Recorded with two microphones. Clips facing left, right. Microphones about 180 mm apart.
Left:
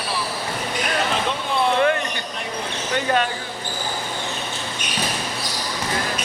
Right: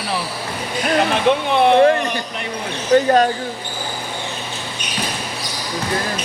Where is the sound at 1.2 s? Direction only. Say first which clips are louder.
Right 7 dB; 65° right (ahead or behind).